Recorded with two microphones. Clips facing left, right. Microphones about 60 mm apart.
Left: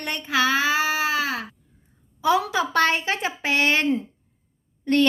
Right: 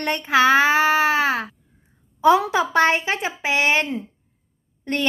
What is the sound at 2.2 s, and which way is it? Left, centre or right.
Speech, right.